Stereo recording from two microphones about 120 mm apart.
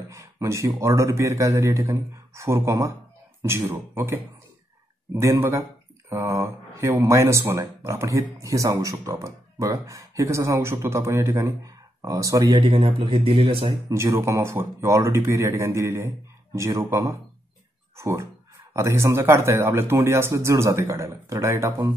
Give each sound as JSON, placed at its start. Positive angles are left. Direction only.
{"t": 0.1, "sound": "speech", "side_deg": -25}
{"t": 12.4, "sound": "speech", "side_deg": -40}
{"t": 13.8, "sound": "speech", "side_deg": -25}